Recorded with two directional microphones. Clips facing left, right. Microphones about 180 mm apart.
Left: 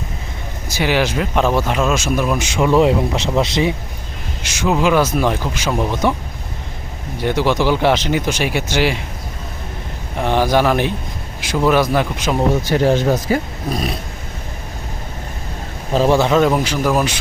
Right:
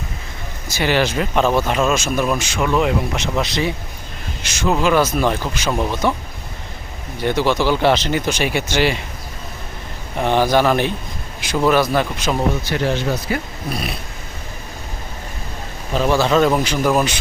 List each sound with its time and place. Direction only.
0.8 s speech: 10° left (ahead or behind)
2.6 s speech: 25° left (ahead or behind)
4.8 s speech: 10° left (ahead or behind)
7.2 s speech: 10° left (ahead or behind)
10.2 s speech: 5° left (ahead or behind)
12.6 s speech: 45° left (ahead or behind)
15.9 s speech: 35° left (ahead or behind)
16.1 s speech: 15° left (ahead or behind)